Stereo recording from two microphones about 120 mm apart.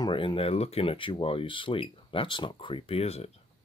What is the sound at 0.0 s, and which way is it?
Speech, 45° left (ahead or behind).